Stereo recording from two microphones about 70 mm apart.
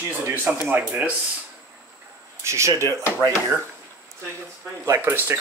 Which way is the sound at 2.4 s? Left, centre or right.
Right.